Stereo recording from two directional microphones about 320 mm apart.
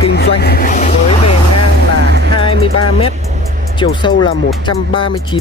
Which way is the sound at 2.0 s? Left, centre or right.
Right.